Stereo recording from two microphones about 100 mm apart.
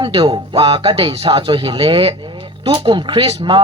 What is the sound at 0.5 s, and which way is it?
Speech, 70° right (ahead or behind).